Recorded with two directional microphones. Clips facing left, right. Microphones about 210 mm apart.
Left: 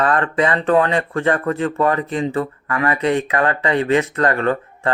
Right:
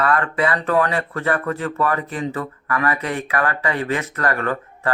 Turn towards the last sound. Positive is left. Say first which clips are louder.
# left 5 dB
turn(degrees=25)  # may be behind; listen again after turning